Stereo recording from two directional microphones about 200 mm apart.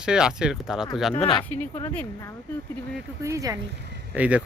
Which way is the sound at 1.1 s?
30° left (ahead or behind).